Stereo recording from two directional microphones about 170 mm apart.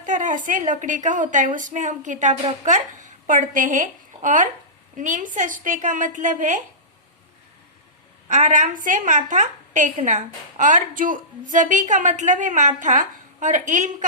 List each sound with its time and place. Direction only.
0.0 s a sound: 50° right (ahead or behind)
0.4 s a woman's voice: 50° right (ahead or behind)
8.3 s a woman's voice: 45° right (ahead or behind)